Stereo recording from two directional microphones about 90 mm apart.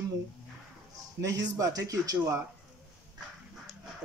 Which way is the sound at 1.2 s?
35° right (ahead or behind).